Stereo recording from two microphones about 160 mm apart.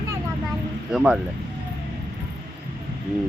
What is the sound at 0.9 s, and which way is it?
Speech, 5° right (ahead or behind).